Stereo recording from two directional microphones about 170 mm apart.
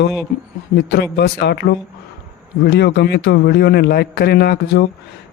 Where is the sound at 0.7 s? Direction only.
80° left.